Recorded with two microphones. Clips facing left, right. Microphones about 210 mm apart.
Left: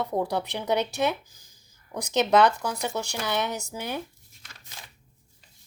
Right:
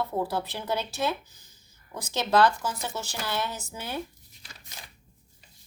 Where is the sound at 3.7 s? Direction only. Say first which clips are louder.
Left 3 dB; 15° left (ahead or behind).